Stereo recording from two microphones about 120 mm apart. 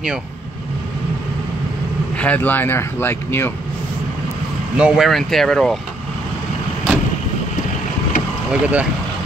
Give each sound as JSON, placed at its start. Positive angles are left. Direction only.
{"t": 2.1, "sound": "speech", "side_deg": 15}
{"t": 4.7, "sound": "speech", "side_deg": -5}
{"t": 8.5, "sound": "speech", "side_deg": -10}